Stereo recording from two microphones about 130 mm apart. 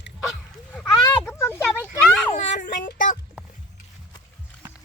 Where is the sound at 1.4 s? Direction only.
20° left (ahead or behind).